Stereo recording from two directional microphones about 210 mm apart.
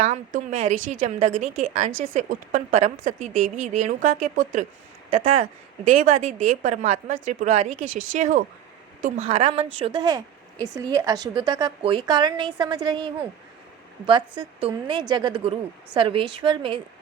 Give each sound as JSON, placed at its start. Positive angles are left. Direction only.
{"t": 0.0, "sound": "a woman's voice", "side_deg": -35}
{"t": 14.1, "sound": "speech", "side_deg": -20}